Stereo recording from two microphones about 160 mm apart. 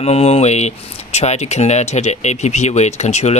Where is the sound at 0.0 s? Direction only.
40° left (ahead or behind).